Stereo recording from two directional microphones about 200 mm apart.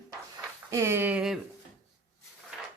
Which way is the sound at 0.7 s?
15° right (ahead or behind).